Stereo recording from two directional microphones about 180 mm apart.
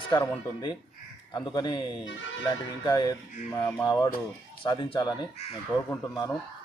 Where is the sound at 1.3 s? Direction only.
25° left (ahead or behind).